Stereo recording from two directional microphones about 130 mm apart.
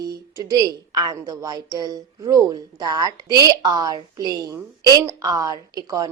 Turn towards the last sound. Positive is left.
turn(degrees=-30)  # may be behind; listen again after turning